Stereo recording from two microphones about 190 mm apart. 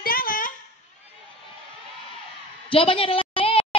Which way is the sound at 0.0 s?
50° left (ahead or behind).